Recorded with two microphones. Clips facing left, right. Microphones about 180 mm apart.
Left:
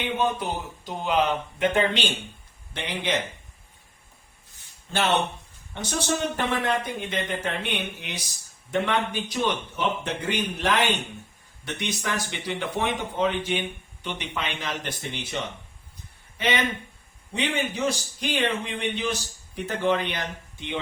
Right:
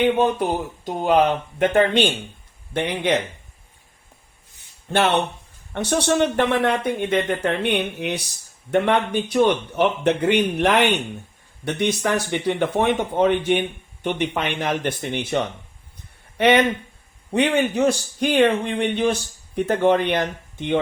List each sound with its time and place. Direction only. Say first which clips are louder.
0.0 s speech: right 8 dB; 55° right (ahead or behind)
4.9 s speech: right 5 dB; 60° right (ahead or behind)
16.4 s speech: right 9 dB; 65° right (ahead or behind)